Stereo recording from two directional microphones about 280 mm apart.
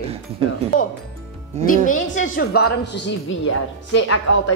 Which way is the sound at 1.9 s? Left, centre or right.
Left.